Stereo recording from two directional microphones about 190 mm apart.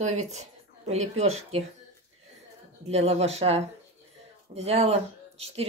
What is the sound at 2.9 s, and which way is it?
Speech, 35° right (ahead or behind).